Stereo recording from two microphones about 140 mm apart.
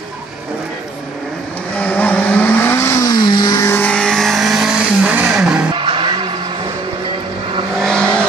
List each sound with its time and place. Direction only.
1.8 s vehicle: 10° left (ahead or behind); by 3.6 s 30° left (ahead or behind)
3.6 s vehicle: 10° left (ahead or behind); by 5.7 s 10° right (ahead or behind)
5.8 s vehicle: 35° right (ahead or behind)
7.8 s vehicle: 5° left (ahead or behind)